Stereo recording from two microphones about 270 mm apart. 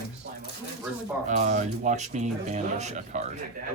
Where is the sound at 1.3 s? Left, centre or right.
Right.